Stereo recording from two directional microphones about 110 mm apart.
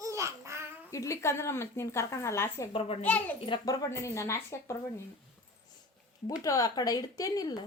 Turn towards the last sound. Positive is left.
turn(degrees=35)  # may be behind; listen again after turning